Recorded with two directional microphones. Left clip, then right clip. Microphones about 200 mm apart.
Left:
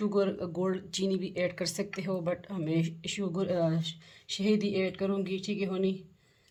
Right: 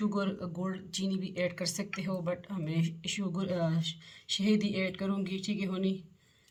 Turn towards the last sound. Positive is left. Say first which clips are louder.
# left 4 dB
turn(degrees=30)  # may be behind; listen again after turning